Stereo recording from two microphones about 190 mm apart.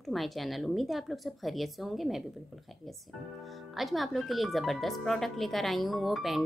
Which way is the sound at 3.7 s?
Centre (ahead or behind).